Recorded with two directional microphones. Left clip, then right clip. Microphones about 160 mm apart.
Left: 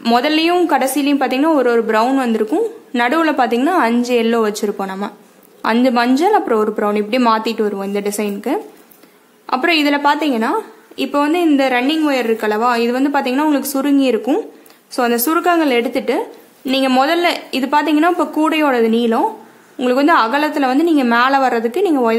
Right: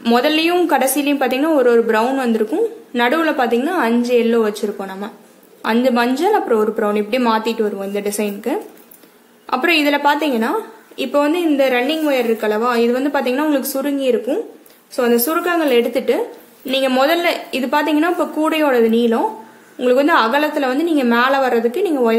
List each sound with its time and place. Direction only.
0.0 s a woman's voice: 20° left (ahead or behind)